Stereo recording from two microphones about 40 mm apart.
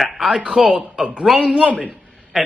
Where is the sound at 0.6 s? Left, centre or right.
Right.